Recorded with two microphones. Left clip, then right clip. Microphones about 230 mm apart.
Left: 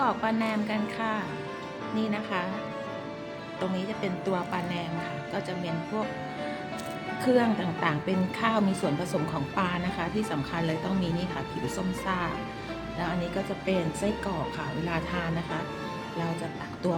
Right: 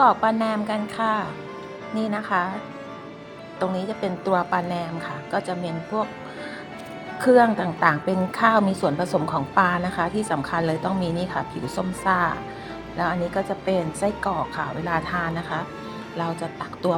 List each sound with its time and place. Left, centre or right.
0.0 s a woman's voice: centre
3.6 s speech: centre
7.3 s a woman's voice: centre